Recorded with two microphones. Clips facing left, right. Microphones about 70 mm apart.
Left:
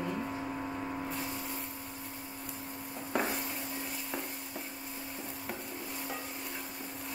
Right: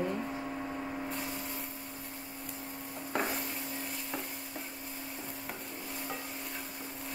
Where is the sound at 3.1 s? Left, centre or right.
Centre.